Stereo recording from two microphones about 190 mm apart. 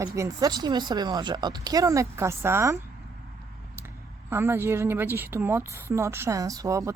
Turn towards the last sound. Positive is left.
turn(degrees=-15)  # may be behind; listen again after turning